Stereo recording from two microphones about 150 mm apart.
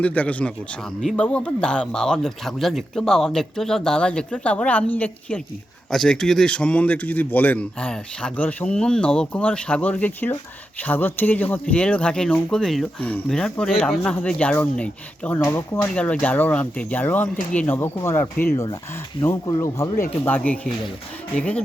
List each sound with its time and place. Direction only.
0.0 s speech: 10° left (ahead or behind)